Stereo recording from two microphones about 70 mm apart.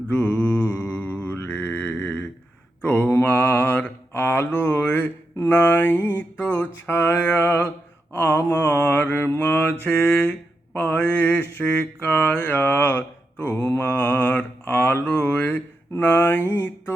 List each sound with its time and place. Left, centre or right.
0.1 s mantra: left
9.8 s mantra: left
11.4 s a sound: left